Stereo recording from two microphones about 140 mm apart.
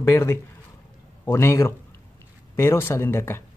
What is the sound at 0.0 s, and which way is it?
Speech, 20° left (ahead or behind).